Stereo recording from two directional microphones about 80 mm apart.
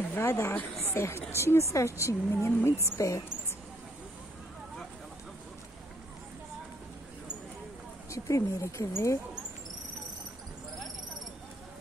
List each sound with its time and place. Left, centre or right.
0.1 s a woman's voice: left
8.1 s a woman's voice: left